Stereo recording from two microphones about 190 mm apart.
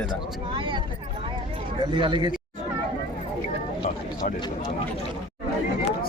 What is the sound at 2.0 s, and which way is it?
Speech, 25° right (ahead or behind).